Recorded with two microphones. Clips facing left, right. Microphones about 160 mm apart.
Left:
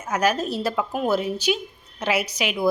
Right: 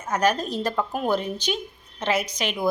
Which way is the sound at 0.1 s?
10° left (ahead or behind).